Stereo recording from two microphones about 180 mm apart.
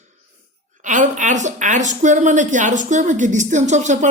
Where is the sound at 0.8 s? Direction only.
45° right (ahead or behind).